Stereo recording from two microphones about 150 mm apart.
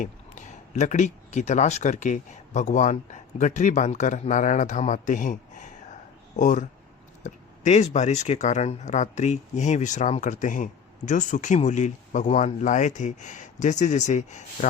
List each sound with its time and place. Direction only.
0.0 s speech: 55° left (ahead or behind)